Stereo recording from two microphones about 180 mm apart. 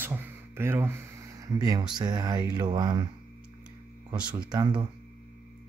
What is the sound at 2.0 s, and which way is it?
Speech, 25° right (ahead or behind).